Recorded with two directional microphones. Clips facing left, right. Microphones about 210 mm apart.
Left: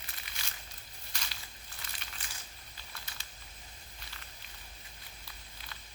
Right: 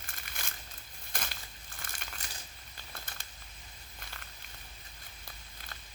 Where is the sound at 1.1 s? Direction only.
50° right (ahead or behind).